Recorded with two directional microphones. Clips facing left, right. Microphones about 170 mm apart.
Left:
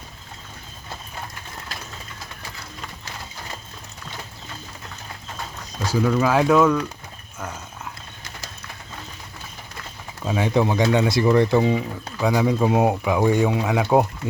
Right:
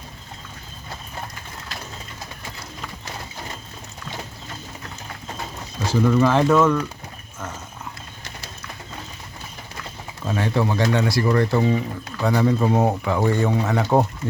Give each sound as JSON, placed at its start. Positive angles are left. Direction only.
{"t": 5.8, "sound": "speech", "side_deg": 5}
{"t": 10.2, "sound": "speech", "side_deg": 15}